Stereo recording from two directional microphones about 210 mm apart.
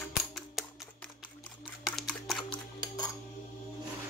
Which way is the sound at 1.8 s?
Centre (ahead or behind).